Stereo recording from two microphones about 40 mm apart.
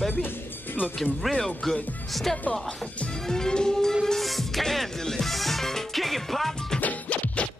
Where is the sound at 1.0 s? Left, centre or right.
Centre.